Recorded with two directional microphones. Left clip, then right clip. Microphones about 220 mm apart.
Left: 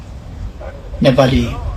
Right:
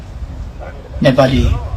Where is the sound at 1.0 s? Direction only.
45° left (ahead or behind).